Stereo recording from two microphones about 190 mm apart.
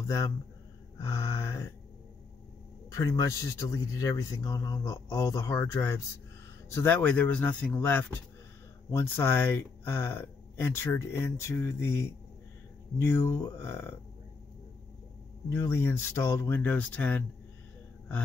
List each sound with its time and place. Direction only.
0.0 s speech: 15° left (ahead or behind)
2.9 s speech: 15° left (ahead or behind)
15.5 s speech: 15° left (ahead or behind)